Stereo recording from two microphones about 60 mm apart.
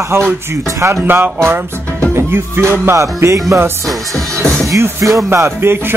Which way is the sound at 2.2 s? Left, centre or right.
Right.